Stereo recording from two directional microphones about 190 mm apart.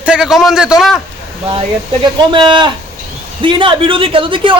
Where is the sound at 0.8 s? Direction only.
Centre (ahead or behind).